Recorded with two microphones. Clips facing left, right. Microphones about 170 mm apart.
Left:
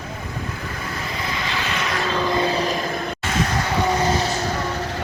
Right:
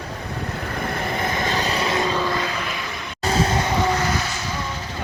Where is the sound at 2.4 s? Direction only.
35° left (ahead or behind).